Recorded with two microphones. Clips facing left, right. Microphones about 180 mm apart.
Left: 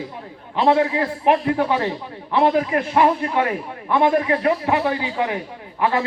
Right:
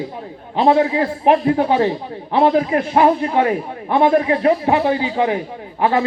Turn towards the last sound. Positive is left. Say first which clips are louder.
# right 3 dB
turn(degrees=-30)  # may be behind; listen again after turning